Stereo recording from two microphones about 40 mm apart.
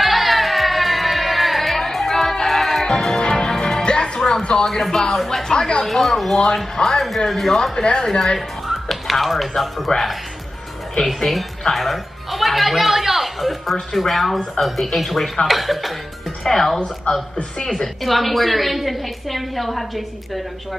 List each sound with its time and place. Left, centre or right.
0.0 s music: centre; by 4.6 s left
5.1 s a woman's voice: centre
5.5 s speech: centre
5.9 s a woman's voice: centre
7.7 s speech: left
8.4 s music: centre
9.5 s a woman's voice: centre
11.7 s music: centre
13.9 s a woman's voice: centre
16.4 s speech: centre
17.6 s speech: centre
18.0 s a woman's voice: centre